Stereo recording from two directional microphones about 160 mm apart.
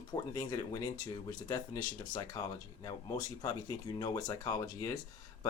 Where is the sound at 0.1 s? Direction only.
25° left (ahead or behind).